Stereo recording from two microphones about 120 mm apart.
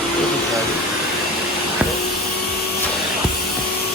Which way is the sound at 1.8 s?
10° right (ahead or behind).